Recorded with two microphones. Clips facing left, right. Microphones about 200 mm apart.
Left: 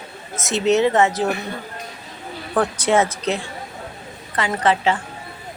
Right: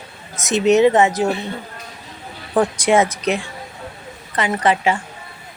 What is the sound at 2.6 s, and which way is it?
Speech, 15° right (ahead or behind).